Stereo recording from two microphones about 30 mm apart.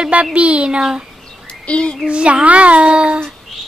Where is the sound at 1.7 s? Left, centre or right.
Left.